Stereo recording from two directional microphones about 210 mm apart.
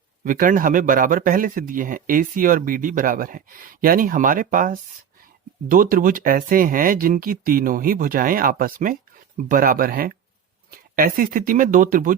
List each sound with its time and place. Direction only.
0.3 s speech: 40° right (ahead or behind)